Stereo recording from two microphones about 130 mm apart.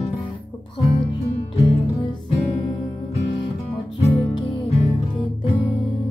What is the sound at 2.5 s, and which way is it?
Music, 40° left (ahead or behind).